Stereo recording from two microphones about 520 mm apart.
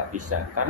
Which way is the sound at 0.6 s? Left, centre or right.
Right.